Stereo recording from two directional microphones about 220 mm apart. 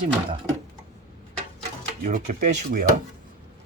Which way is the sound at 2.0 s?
35° right (ahead or behind).